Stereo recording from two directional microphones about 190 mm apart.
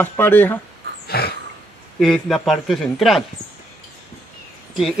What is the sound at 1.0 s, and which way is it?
Dog, 55° left (ahead or behind).